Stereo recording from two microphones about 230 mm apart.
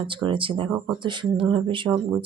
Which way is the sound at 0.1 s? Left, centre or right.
Right.